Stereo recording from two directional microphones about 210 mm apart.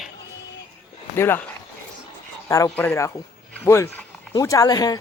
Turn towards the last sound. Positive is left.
turn(degrees=20)  # may be behind; listen again after turning